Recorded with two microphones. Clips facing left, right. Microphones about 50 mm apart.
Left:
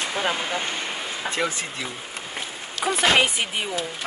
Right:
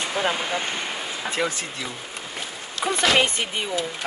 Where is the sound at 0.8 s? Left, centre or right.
Centre.